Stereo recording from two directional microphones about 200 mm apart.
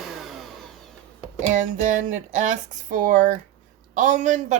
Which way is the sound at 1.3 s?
40° right (ahead or behind).